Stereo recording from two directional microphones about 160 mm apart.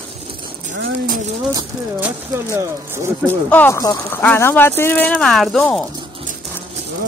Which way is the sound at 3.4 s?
10° left (ahead or behind).